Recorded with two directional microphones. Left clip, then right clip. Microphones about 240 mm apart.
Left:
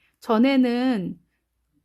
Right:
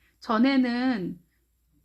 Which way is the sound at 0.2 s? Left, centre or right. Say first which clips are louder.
Left 4 dB; left.